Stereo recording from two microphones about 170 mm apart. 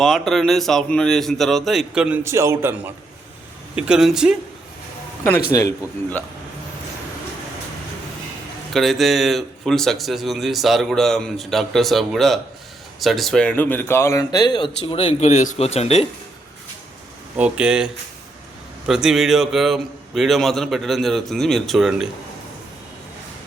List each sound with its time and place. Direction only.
0.0 s speech: centre (ahead or behind)
5.5 s a man's voice: 20° left (ahead or behind)
8.7 s speech: centre (ahead or behind); by 16.0 s 35° left (ahead or behind)
17.3 s speech: 5° right (ahead or behind)